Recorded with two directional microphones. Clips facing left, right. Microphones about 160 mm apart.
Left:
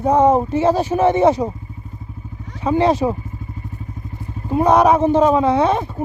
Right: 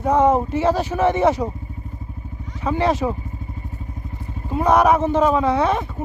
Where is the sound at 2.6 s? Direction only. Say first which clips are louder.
Left 4 dB; 20° left (ahead or behind).